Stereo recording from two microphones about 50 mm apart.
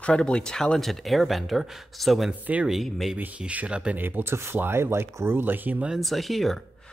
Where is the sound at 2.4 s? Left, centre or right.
Right.